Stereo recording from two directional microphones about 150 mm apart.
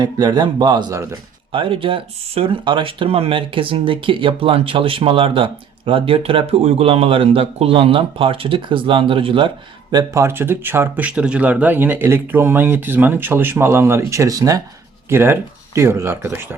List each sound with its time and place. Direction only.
0.0 s speech: 25° right (ahead or behind)
1.5 s speech: 35° right (ahead or behind)
10.2 s speech: 15° right (ahead or behind)